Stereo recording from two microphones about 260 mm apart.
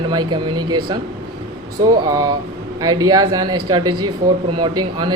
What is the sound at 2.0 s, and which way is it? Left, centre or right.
Speech, centre.